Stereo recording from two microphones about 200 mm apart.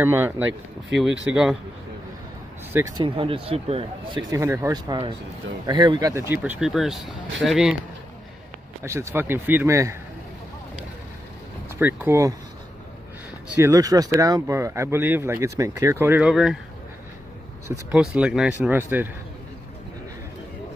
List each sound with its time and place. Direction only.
0.0 s speech: 10° right (ahead or behind)
3.0 s speech: 25° right (ahead or behind)
4.3 s speech: 15° right (ahead or behind)
8.8 s speech: 15° right (ahead or behind)
11.8 s speech: 10° right (ahead or behind)
13.6 s speech: 15° right (ahead or behind)
17.9 s speech: 5° right (ahead or behind)